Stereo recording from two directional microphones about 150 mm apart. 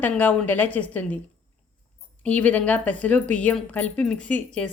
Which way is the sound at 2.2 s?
10° left (ahead or behind).